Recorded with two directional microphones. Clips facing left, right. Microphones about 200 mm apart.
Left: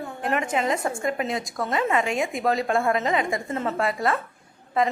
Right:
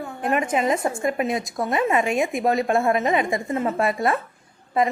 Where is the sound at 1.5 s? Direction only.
20° right (ahead or behind).